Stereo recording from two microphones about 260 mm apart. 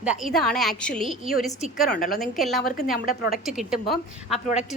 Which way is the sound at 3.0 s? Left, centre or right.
Left.